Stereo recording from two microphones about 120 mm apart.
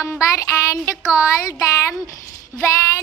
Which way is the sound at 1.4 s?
30° left (ahead or behind).